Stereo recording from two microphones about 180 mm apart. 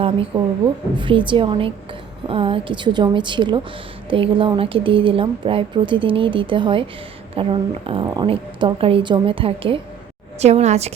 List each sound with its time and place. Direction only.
0.0 s a woman's voice: 25° right (ahead or behind)